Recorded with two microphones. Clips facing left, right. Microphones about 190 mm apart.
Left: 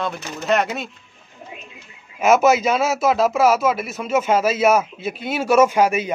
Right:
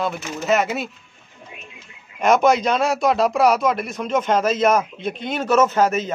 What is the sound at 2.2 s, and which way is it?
Speech, 5° left (ahead or behind).